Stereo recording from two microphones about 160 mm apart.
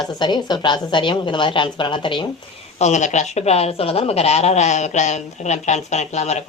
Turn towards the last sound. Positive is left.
turn(degrees=45)  # may be behind; listen again after turning